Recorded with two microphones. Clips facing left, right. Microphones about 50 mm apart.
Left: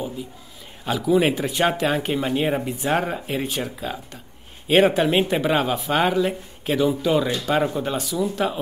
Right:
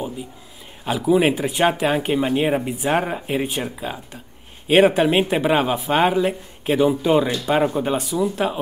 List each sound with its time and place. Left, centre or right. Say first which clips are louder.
0.8 s speech: right 2 dB; centre